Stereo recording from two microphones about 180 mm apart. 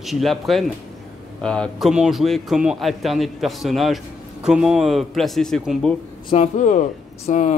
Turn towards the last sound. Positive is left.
turn(degrees=45)  # may be behind; listen again after turning